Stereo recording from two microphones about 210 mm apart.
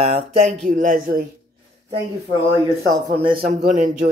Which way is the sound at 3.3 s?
40° right (ahead or behind).